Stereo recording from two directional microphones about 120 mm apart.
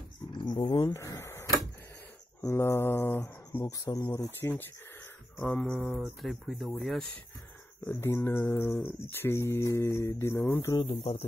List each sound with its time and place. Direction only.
0.3 s dog: 40° left (ahead or behind)
0.9 s speech: 25° left (ahead or behind)
3.6 s speech: 30° left (ahead or behind)
4.4 s speech: 20° left (ahead or behind); by 7.1 s centre (ahead or behind)
7.8 s speech: 20° left (ahead or behind)
10.8 s speech: 60° left (ahead or behind)